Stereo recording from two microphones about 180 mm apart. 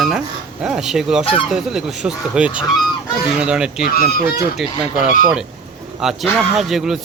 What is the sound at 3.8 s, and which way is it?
Speech, 60° left (ahead or behind).